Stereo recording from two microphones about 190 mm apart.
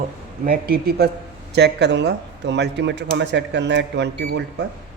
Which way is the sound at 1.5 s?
65° right (ahead or behind).